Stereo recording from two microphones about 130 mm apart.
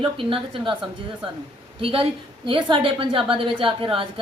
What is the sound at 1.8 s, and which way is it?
A woman's voice, 45° right (ahead or behind).